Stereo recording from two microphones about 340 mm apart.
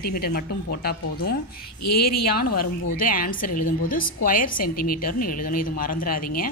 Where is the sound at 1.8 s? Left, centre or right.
Left.